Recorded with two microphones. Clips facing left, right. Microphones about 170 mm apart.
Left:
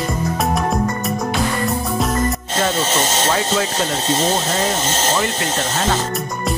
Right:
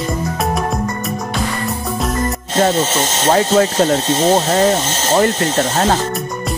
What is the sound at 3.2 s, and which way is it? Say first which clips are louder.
Speech: right 6 dB; 40° right (ahead or behind).